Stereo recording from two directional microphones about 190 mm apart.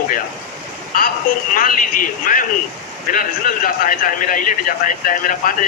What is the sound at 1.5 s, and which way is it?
Speech, 45° left (ahead or behind).